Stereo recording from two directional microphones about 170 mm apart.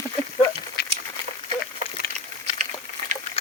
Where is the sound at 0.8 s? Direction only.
70° left (ahead or behind).